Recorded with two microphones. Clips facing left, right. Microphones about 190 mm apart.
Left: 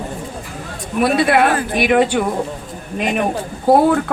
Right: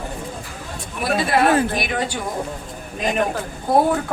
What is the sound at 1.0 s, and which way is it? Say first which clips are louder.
Speech: left 4 dB; 70° left (ahead or behind).